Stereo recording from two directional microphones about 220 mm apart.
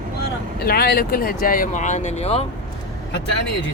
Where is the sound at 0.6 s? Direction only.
45° left (ahead or behind); by 2.5 s 30° left (ahead or behind).